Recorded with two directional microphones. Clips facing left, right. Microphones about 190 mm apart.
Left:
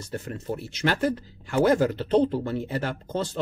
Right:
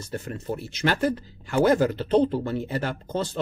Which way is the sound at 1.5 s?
5° right (ahead or behind).